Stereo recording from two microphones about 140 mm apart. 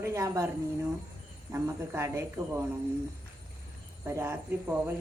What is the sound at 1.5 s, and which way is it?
A woman's voice, 15° right (ahead or behind).